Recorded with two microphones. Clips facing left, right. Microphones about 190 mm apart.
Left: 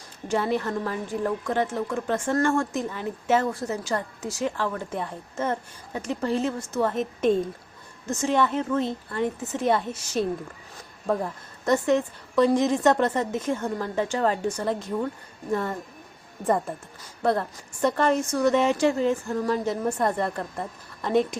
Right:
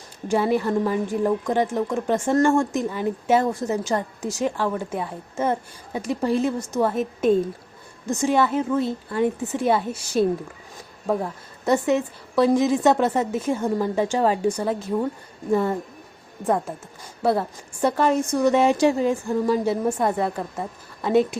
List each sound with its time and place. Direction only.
0.3 s a woman's voice: 10° right (ahead or behind)
16.4 s a woman's voice: centre (ahead or behind)